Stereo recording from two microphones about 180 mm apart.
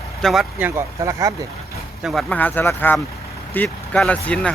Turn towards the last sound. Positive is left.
turn(degrees=5)  # may be behind; listen again after turning